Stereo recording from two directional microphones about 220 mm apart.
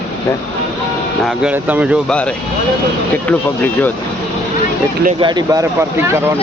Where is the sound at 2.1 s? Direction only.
5° left (ahead or behind).